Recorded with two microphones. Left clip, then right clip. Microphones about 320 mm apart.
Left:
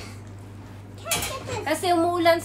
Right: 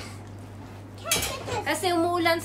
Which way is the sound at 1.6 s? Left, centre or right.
Centre.